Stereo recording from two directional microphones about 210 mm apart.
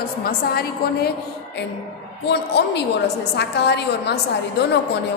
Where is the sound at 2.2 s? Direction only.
50° left (ahead or behind).